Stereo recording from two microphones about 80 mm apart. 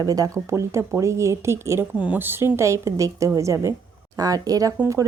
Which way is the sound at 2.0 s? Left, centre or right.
Right.